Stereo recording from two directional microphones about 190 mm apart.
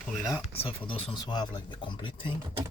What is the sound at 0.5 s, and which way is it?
Speech, 30° left (ahead or behind).